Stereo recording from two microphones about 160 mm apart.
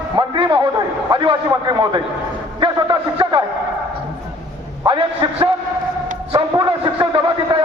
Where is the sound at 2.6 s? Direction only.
30° right (ahead or behind).